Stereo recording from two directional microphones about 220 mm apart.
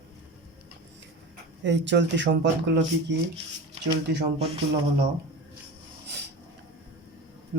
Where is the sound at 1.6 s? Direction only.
55° right (ahead or behind).